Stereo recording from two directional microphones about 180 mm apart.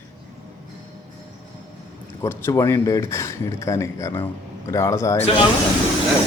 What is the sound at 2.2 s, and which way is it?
Speech, 15° left (ahead or behind).